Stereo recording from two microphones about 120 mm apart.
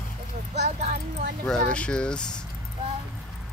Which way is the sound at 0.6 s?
65° right (ahead or behind).